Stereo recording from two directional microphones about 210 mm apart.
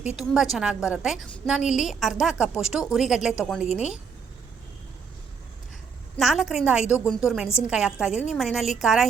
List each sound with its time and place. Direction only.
0.0 s a woman's voice: 5° right (ahead or behind)
3.7 s speech: 30° left (ahead or behind)
6.1 s a woman's voice: centre (ahead or behind)